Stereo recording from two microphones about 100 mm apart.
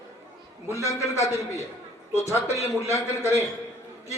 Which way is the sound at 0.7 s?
30° left (ahead or behind).